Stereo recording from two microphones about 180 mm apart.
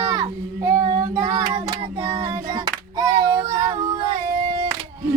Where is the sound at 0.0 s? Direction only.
20° right (ahead or behind).